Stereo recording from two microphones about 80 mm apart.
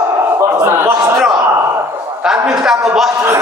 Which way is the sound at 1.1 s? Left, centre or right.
Centre.